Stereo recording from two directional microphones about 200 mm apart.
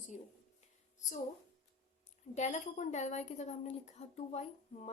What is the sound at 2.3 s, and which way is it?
Speech, 35° left (ahead or behind).